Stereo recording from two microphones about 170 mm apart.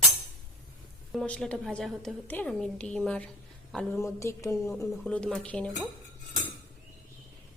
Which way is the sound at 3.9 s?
15° left (ahead or behind).